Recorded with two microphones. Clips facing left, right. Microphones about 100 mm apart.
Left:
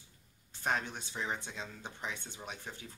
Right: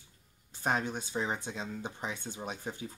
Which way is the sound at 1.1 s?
25° right (ahead or behind).